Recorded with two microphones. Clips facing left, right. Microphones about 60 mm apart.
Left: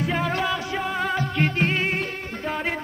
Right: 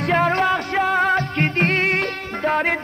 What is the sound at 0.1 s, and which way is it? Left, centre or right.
Music, right.